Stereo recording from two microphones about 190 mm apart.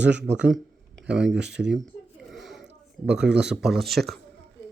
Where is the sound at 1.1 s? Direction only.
5° right (ahead or behind).